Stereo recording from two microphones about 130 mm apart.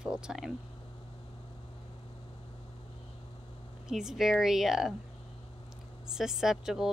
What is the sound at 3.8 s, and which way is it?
Speech, 5° right (ahead or behind).